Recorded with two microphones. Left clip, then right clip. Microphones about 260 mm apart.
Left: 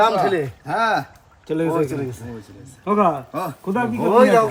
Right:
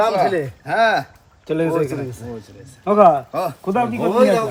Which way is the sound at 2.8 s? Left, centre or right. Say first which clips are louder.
Right 6 dB; right.